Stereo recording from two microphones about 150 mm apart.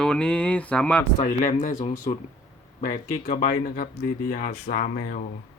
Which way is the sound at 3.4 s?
70° left (ahead or behind).